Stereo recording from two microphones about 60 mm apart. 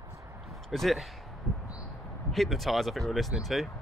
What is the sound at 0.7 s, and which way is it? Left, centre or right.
Speech, centre.